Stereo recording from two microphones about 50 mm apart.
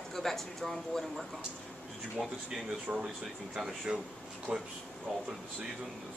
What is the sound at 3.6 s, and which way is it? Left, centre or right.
Speech, centre.